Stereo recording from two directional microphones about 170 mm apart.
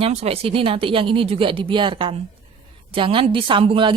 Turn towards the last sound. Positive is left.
turn(degrees=-30)  # may be behind; listen again after turning